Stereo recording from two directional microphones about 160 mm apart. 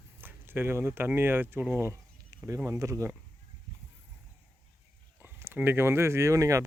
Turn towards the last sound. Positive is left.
turn(degrees=-20)  # may be behind; listen again after turning